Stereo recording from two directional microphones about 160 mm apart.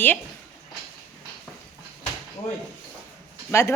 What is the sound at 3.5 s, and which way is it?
Speech, 15° left (ahead or behind).